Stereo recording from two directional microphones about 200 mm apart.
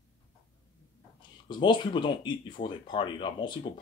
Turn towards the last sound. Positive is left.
turn(degrees=25)  # may be behind; listen again after turning